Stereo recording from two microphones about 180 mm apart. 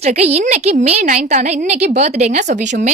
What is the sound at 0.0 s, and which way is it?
A woman's voice, 35° right (ahead or behind).